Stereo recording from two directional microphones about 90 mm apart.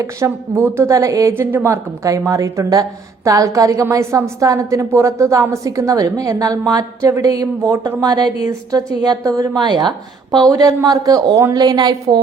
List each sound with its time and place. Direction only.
0.0 s a woman's voice: 30° right (ahead or behind)
1.3 s a woman's voice: 25° right (ahead or behind); by 9.5 s 40° right (ahead or behind)
9.6 s speech: 55° right (ahead or behind)
10.3 s speech: 45° right (ahead or behind)